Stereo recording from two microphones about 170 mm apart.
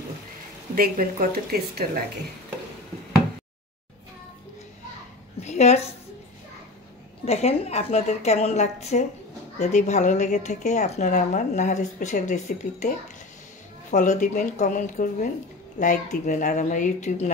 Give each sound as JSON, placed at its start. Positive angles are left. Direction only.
{"t": 0.7, "sound": "a woman's voice", "side_deg": -55}
{"t": 5.4, "sound": "a sound", "side_deg": 40}
{"t": 7.2, "sound": "a woman's voice", "side_deg": 40}
{"t": 13.9, "sound": "a woman's voice", "side_deg": 45}